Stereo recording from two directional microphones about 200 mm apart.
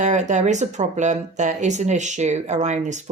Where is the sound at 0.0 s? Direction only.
35° right (ahead or behind).